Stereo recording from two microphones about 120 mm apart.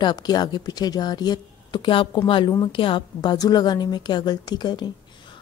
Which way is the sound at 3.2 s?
35° left (ahead or behind).